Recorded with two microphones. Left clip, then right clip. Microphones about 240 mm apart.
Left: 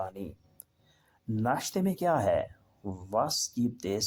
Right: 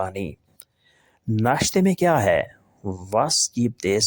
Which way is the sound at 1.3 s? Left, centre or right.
Right.